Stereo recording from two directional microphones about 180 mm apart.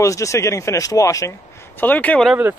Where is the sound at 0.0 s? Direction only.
15° left (ahead or behind).